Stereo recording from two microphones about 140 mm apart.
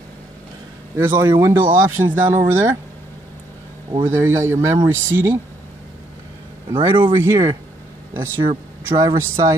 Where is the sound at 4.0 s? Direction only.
15° right (ahead or behind).